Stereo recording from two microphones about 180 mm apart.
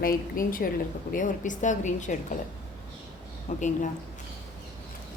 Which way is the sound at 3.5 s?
45° left (ahead or behind).